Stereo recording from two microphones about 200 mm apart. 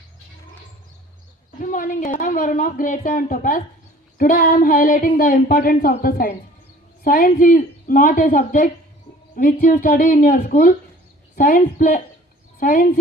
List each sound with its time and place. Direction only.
1.5 s a woman's voice: 40° left (ahead or behind)